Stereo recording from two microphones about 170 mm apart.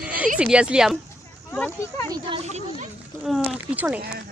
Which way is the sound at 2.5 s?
40° right (ahead or behind).